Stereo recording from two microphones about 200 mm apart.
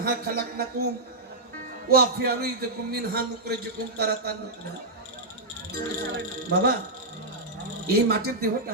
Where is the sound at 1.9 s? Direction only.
50° right (ahead or behind).